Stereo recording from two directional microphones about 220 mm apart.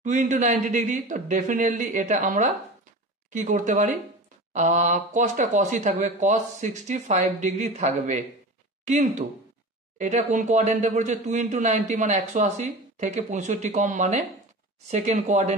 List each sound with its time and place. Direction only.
0.0 s speech: 35° right (ahead or behind)
9.9 s speech: 35° right (ahead or behind)